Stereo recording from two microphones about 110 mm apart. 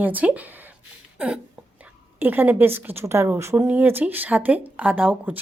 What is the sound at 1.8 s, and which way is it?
A woman's voice, 15° right (ahead or behind).